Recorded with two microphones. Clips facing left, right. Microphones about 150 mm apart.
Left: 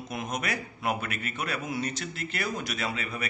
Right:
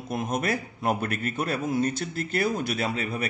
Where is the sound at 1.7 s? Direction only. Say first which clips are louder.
Right 7 dB; 50° right (ahead or behind).